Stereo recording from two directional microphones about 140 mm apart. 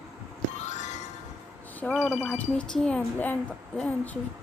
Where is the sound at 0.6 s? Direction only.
55° left (ahead or behind).